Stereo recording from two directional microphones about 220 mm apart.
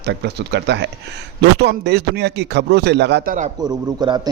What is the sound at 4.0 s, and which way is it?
Speech, 20° right (ahead or behind).